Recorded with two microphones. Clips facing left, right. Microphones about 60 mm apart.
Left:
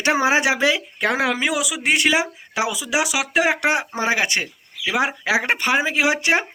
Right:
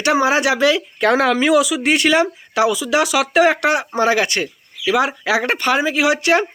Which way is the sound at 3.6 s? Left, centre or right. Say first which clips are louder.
Right 4 dB; left.